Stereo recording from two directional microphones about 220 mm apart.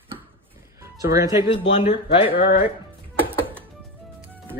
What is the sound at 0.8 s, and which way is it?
Music, 15° right (ahead or behind).